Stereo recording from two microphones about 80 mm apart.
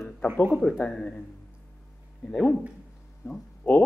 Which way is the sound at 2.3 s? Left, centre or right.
Centre.